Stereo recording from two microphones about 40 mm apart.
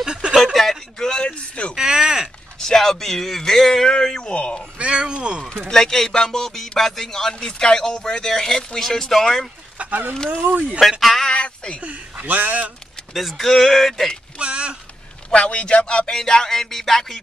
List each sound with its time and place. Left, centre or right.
0.0 s a sound: right
0.6 s a sound: centre
1.8 s a sound: centre
2.6 s a man's voice: centre; by 4.6 s left
4.7 s speech: right
5.7 s speech: centre
9.8 s speech: right
10.8 s speech: centre
11.8 s speech: right
13.4 s speech: centre
14.4 s speech: right
15.3 s a man's voice: left
16.1 s speech: centre